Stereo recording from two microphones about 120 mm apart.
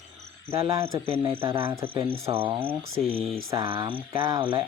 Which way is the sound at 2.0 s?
25° right (ahead or behind).